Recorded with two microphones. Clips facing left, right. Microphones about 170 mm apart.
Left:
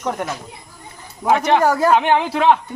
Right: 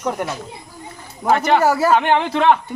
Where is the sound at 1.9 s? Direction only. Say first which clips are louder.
Even; 5° left (ahead or behind).